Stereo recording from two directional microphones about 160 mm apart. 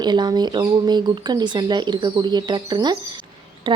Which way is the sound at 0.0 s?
25° right (ahead or behind).